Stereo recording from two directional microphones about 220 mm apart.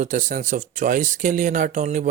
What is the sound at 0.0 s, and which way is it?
Speech, 35° right (ahead or behind).